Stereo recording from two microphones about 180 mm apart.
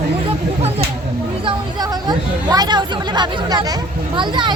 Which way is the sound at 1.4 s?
25° right (ahead or behind).